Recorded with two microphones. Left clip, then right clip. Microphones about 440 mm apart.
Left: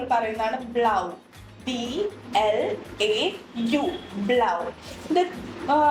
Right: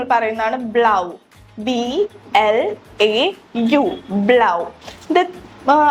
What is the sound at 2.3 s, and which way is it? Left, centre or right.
A woman's voice, right.